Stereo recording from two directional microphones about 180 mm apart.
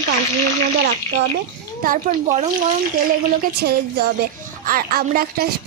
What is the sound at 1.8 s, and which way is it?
Speech, 50° right (ahead or behind).